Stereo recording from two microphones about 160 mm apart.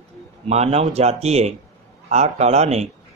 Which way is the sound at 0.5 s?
40° right (ahead or behind).